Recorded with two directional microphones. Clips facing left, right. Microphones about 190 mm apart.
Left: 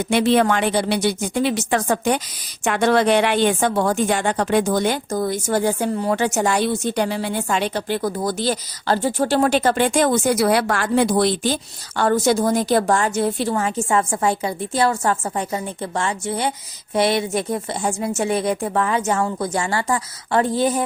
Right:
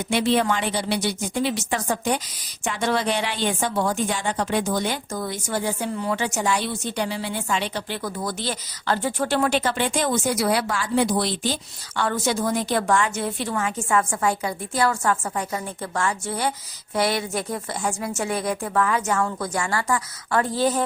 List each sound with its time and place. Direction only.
0.0 s a woman's voice: 55° left (ahead or behind); by 20.8 s 15° left (ahead or behind)